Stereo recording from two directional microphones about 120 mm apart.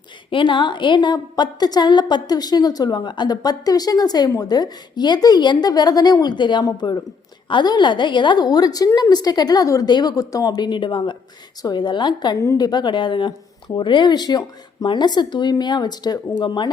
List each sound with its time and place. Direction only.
0.3 s a woman's voice: 45° left (ahead or behind)